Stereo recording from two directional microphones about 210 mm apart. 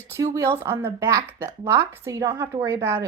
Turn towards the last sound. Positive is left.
turn(degrees=-10)  # may be behind; listen again after turning